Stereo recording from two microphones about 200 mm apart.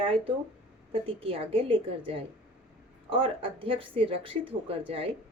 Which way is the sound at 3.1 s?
25° right (ahead or behind).